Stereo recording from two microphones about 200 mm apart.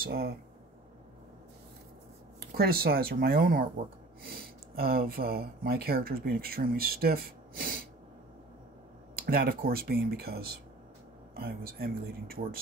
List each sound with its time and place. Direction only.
0.0 s speech: 50° right (ahead or behind)
2.4 s speech: 50° right (ahead or behind)
9.1 s speech: 50° right (ahead or behind)